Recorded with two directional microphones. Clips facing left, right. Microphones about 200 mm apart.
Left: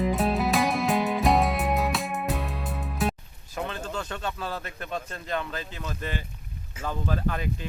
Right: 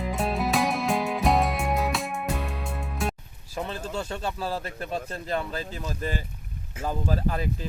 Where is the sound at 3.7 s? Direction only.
30° right (ahead or behind).